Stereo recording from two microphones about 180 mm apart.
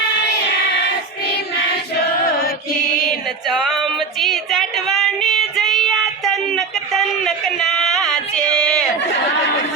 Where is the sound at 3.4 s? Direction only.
Centre (ahead or behind).